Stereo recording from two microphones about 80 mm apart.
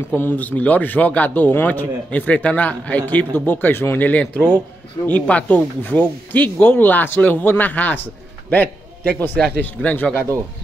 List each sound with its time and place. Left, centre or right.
0.1 s a man's voice: left